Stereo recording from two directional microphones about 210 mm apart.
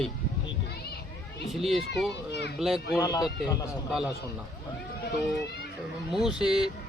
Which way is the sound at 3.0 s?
20° left (ahead or behind).